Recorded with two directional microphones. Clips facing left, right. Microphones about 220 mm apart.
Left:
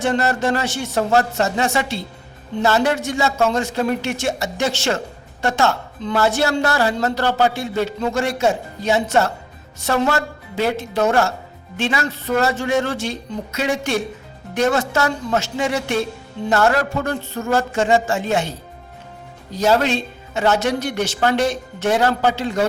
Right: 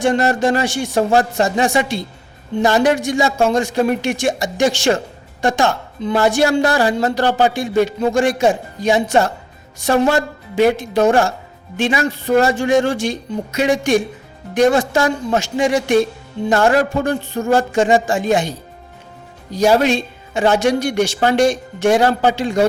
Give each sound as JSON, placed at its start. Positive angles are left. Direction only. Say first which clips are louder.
{"t": 0.0, "sound": "a woman's voice", "louder": "right 4 dB", "side_deg": -15}